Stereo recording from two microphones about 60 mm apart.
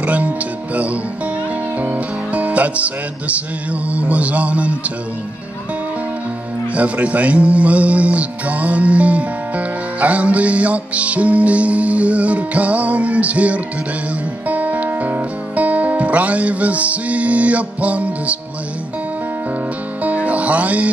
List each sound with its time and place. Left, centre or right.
0.0 s speech: right
0.7 s music: right
6.7 s music: right
20.0 s music: right